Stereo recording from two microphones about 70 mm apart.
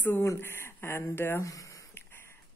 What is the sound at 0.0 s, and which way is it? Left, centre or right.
Speech, left.